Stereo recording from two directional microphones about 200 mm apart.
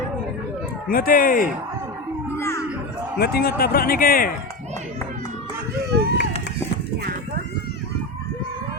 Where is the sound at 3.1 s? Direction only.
50° left (ahead or behind).